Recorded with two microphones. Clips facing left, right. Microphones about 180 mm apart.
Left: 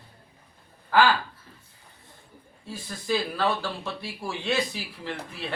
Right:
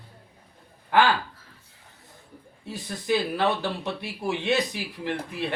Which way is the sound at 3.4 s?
20° right (ahead or behind).